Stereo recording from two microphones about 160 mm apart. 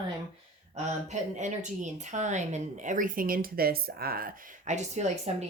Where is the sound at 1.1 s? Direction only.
50° right (ahead or behind); by 4.3 s 70° right (ahead or behind).